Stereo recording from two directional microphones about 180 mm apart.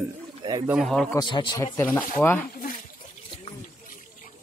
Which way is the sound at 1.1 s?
25° left (ahead or behind).